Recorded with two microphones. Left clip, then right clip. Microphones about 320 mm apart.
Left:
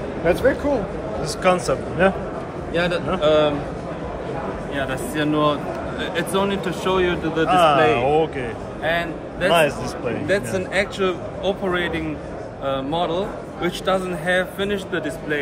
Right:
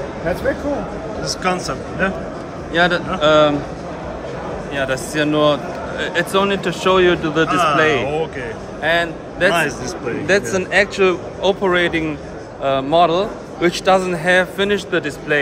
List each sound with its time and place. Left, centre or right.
1.2 s a man's voice: centre
2.7 s a man's voice: right
4.7 s a man's voice: right
7.4 s a man's voice: centre
8.8 s a man's voice: right
9.5 s a man's voice: centre
10.2 s a man's voice: right